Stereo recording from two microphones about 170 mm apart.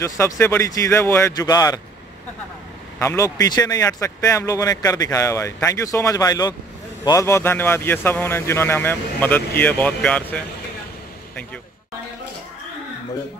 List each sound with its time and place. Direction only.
0.0 s speech: 15° left (ahead or behind)
3.0 s a man's voice: 15° left (ahead or behind)